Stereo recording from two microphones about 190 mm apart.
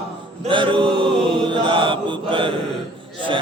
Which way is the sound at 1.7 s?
25° right (ahead or behind).